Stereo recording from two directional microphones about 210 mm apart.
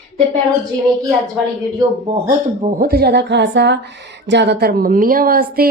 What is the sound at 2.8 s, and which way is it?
Speech, 45° right (ahead or behind).